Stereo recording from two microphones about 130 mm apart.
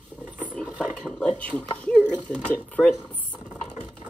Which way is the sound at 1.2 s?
10° left (ahead or behind).